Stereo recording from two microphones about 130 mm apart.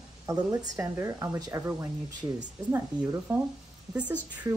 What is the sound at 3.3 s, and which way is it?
Speech, 15° right (ahead or behind).